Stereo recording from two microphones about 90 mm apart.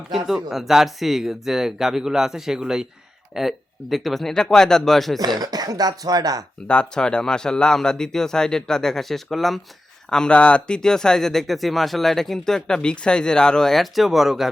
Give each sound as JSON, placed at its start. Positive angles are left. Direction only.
{"t": 0.3, "sound": "speech", "side_deg": -5}
{"t": 5.4, "sound": "speech", "side_deg": -45}
{"t": 6.7, "sound": "speech", "side_deg": 10}